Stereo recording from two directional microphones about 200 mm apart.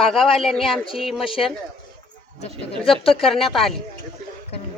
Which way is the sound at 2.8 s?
25° left (ahead or behind).